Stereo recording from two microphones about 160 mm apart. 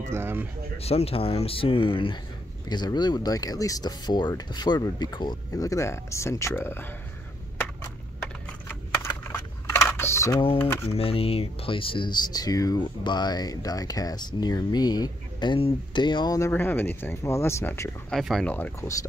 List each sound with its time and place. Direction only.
0.1 s speech: 15° right (ahead or behind)
0.7 s speech: 40° left (ahead or behind); by 6.9 s 15° left (ahead or behind)
8.6 s computer keyboard: 15° left (ahead or behind)
10.4 s speech: 35° left (ahead or behind); by 17.8 s 15° left (ahead or behind)
18.1 s speech: centre (ahead or behind)
18.5 s speech: 15° left (ahead or behind)